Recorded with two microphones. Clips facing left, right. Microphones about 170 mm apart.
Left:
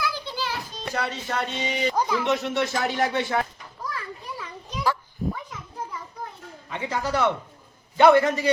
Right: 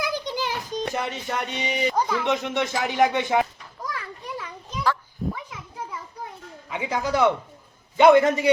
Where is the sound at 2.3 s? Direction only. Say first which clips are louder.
Even; 15° right (ahead or behind).